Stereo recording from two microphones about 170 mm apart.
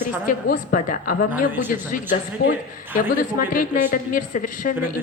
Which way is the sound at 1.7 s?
55° left (ahead or behind).